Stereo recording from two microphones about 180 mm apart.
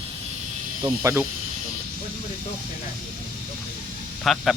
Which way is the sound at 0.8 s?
15° right (ahead or behind).